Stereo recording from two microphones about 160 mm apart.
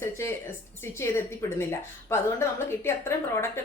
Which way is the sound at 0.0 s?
15° left (ahead or behind).